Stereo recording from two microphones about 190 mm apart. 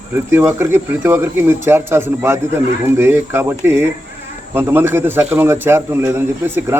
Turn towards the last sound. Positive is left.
turn(degrees=-10)  # may be behind; listen again after turning